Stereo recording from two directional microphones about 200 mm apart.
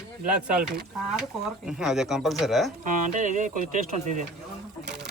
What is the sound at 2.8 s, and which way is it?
Speech, 40° right (ahead or behind).